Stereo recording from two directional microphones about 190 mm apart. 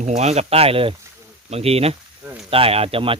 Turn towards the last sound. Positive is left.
turn(degrees=-30)  # may be behind; listen again after turning